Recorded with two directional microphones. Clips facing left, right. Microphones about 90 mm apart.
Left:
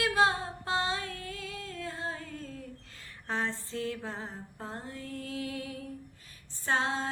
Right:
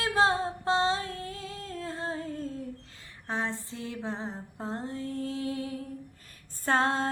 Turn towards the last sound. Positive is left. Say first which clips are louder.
# right 4 dB
turn(degrees=-50)  # may be behind; listen again after turning